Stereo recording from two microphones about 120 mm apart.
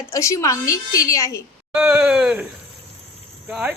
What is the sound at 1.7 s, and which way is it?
Speech, 15° right (ahead or behind).